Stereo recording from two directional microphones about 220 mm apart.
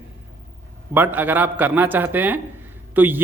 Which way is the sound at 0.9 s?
10° right (ahead or behind).